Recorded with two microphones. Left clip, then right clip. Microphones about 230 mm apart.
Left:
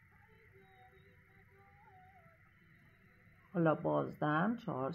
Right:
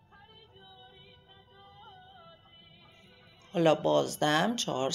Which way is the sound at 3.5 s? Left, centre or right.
Right.